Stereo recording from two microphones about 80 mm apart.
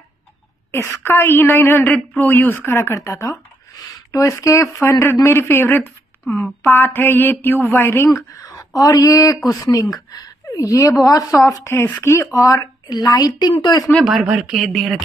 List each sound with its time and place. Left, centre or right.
1.0 s a woman's voice: left
5.2 s a sound: left
6.2 s speech: centre
6.6 s a sound: left
7.7 s a woman's voice: left
8.5 s a woman's voice: left
12.4 s a woman's voice: left
14.0 s speech: centre